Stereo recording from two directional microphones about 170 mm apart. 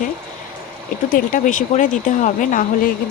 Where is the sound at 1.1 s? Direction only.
55° left (ahead or behind).